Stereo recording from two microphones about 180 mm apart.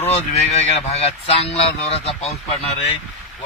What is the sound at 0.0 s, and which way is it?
Speech, 35° left (ahead or behind).